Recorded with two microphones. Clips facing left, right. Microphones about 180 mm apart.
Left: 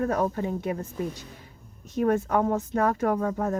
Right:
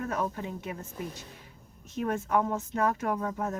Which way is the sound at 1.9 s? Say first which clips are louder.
Left 5 dB; 35° left (ahead or behind).